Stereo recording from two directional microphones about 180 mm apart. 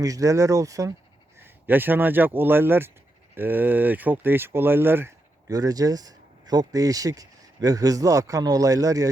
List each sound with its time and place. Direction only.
0.0 s speech: 20° right (ahead or behind)